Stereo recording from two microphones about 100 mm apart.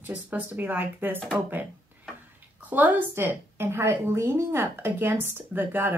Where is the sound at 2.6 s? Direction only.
15° right (ahead or behind).